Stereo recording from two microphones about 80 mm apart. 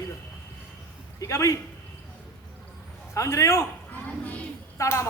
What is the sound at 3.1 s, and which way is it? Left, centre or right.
Speech, left.